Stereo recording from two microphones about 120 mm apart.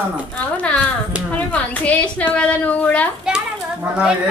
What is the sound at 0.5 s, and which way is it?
A woman's voice, 10° left (ahead or behind).